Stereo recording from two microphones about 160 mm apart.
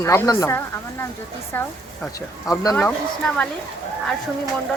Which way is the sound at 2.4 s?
20° left (ahead or behind).